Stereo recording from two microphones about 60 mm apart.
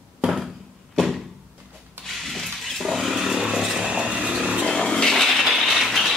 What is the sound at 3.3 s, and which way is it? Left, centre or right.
Chainsaw, centre.